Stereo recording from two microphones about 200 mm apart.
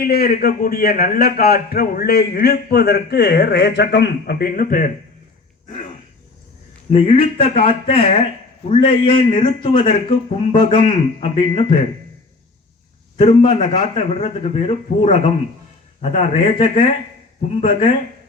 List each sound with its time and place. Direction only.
0.0 s a man's voice: 50° left (ahead or behind)
6.9 s speech: 30° left (ahead or behind)
13.1 s a man's voice: 30° left (ahead or behind)